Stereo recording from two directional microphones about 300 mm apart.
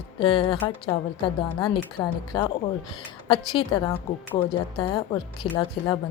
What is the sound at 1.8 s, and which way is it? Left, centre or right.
Speech, centre.